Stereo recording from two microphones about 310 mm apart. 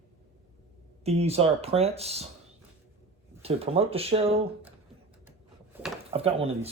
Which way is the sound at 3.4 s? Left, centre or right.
Centre.